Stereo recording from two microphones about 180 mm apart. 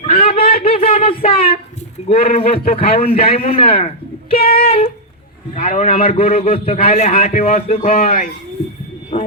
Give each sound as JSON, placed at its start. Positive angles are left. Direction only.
{"t": 0.0, "sound": "a sound", "side_deg": 35}
{"t": 2.0, "sound": "a man's voice", "side_deg": 30}
{"t": 4.4, "sound": "speech", "side_deg": 55}
{"t": 5.5, "sound": "a man's voice", "side_deg": 40}
{"t": 7.9, "sound": "a man's voice", "side_deg": 45}